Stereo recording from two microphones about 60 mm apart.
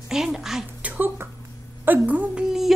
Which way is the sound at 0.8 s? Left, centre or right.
Right.